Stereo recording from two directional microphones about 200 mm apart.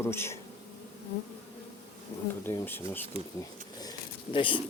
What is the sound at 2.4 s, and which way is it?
Speech, 10° left (ahead or behind).